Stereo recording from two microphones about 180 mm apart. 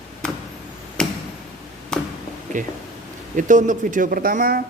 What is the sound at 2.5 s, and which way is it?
Speech, 45° right (ahead or behind).